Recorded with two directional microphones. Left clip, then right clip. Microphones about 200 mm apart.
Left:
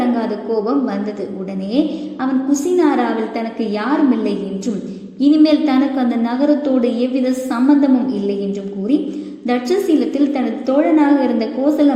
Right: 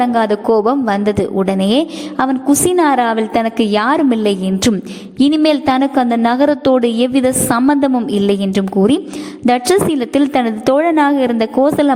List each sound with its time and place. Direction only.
0.6 s a woman's voice: 40° right (ahead or behind)